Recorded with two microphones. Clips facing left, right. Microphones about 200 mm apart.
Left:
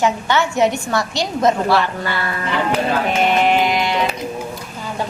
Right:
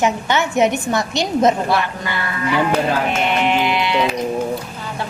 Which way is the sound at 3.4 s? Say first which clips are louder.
Left 2 dB; 40° left (ahead or behind).